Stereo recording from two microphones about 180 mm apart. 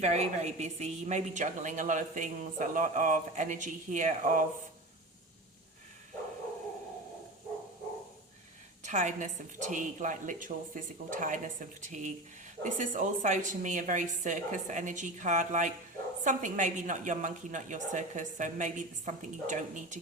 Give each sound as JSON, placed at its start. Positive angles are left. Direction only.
{"t": 0.0, "sound": "a woman's voice", "side_deg": -40}
{"t": 8.8, "sound": "a woman's voice", "side_deg": -40}